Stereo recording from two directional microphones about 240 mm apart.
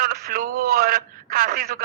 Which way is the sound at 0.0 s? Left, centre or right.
Right.